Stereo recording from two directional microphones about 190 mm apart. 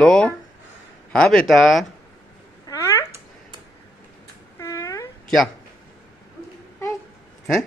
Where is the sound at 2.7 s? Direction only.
15° left (ahead or behind).